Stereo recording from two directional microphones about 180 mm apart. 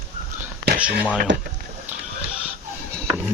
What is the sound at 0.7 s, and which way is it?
Speech, 10° right (ahead or behind).